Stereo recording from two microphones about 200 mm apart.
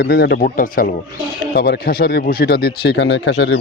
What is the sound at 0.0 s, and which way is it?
Speech, 55° left (ahead or behind).